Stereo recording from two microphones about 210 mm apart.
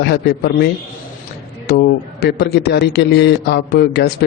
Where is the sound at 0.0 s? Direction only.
50° left (ahead or behind).